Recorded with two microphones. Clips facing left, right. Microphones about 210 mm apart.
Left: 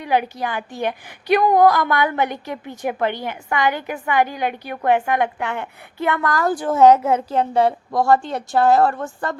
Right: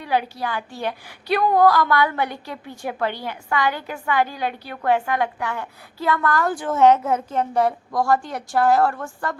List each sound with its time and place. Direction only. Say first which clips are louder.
0.0 s a woman's voice: left 3 dB; 15° left (ahead or behind)
6.2 s a woman's voice: left 2 dB; 40° left (ahead or behind); by 9.3 s 20° left (ahead or behind)